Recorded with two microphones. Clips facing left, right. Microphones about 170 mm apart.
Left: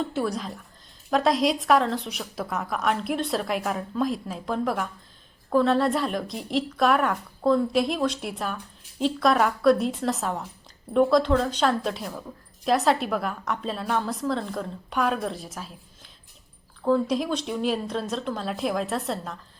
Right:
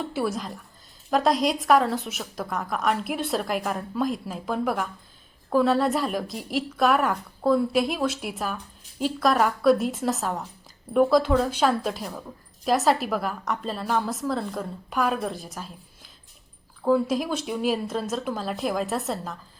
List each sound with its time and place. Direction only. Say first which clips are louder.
0.1 s a woman's voice: even; 5° right (ahead or behind)
16.8 s a woman's voice: right 1 dB; 5° right (ahead or behind)